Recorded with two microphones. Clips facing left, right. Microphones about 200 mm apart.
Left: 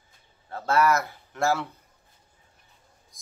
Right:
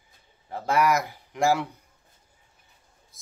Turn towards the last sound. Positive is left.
turn(degrees=-5)  # may be behind; listen again after turning